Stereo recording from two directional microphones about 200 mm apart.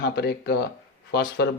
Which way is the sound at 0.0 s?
55° left (ahead or behind).